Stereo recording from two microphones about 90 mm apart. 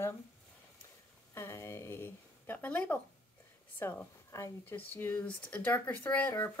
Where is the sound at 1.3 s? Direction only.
30° left (ahead or behind).